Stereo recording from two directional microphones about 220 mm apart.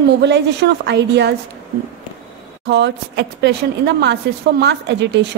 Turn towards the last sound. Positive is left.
turn(degrees=-55)  # may be behind; listen again after turning